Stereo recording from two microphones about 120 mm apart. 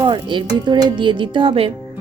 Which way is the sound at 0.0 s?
40° right (ahead or behind).